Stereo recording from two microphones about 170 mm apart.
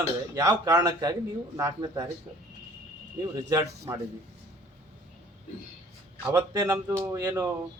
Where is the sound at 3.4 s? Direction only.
20° right (ahead or behind).